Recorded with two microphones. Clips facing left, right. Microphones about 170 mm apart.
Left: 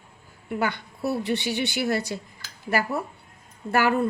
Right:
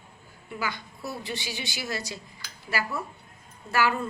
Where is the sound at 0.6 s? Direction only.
60° left (ahead or behind).